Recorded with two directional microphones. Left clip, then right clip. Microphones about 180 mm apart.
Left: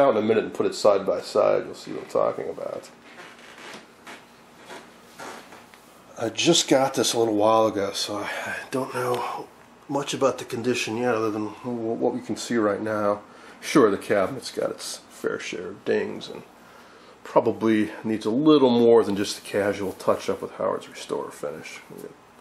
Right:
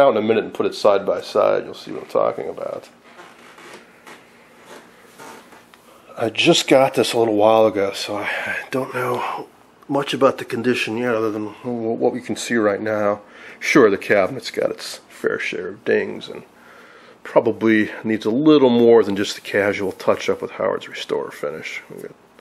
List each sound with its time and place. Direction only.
0.0 s speech: 10° right (ahead or behind)
6.1 s speech: 10° right (ahead or behind)
12.3 s speech: 25° right (ahead or behind)
12.8 s speech: 10° right (ahead or behind)